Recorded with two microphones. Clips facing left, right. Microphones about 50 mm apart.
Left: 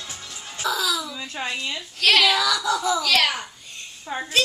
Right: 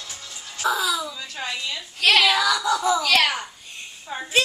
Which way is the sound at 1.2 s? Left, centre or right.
Left.